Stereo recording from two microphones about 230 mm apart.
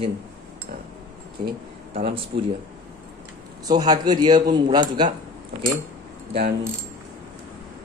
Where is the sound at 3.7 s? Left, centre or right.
Centre.